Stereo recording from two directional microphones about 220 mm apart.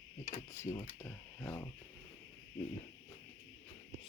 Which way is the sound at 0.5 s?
10° left (ahead or behind).